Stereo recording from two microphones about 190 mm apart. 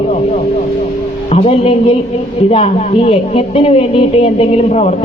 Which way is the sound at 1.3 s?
35° left (ahead or behind).